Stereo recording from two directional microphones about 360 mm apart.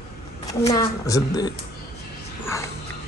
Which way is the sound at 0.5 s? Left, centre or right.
Centre.